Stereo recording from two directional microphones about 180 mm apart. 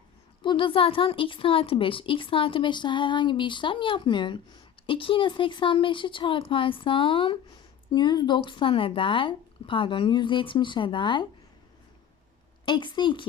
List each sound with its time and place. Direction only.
0.4 s a woman's voice: 30° left (ahead or behind)
12.6 s a woman's voice: 25° left (ahead or behind)